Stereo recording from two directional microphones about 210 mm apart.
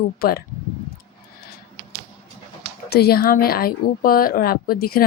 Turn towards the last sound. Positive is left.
turn(degrees=45)  # may be behind; listen again after turning